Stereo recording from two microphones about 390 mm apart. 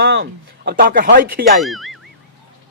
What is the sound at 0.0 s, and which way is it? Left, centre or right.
A man's voice, right.